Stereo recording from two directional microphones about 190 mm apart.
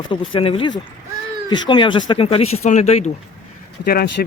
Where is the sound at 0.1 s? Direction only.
30° left (ahead or behind).